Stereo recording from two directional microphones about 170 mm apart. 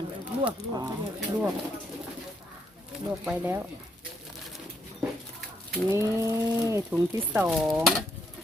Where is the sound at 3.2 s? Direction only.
10° right (ahead or behind).